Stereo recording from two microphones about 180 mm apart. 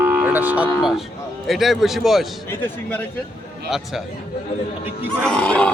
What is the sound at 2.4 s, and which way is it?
Speech, 10° left (ahead or behind).